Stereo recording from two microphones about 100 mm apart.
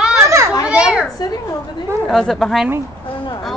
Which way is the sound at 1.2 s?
40° left (ahead or behind).